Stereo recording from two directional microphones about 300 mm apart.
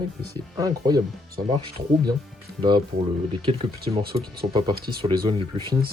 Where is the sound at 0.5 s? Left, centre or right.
Centre.